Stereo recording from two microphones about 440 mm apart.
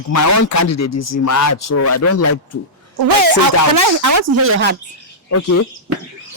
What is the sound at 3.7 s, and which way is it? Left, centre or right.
Speech, right.